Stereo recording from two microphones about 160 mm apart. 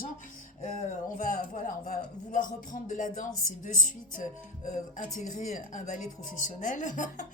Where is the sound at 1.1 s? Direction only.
55° left (ahead or behind).